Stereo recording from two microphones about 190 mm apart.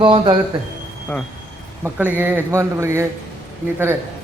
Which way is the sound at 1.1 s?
10° left (ahead or behind).